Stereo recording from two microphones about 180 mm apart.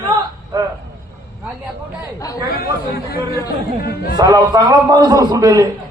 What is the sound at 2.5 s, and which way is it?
Chatter, 60° left (ahead or behind).